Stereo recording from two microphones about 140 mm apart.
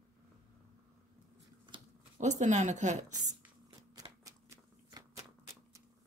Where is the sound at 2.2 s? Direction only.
60° right (ahead or behind).